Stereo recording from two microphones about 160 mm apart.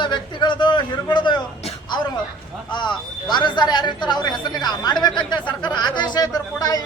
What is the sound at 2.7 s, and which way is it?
Speech, 30° left (ahead or behind).